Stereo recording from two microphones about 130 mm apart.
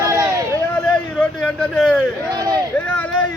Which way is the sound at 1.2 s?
5° left (ahead or behind).